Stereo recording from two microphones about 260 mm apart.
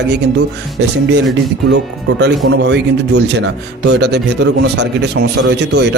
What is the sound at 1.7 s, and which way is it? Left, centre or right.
Speech, right.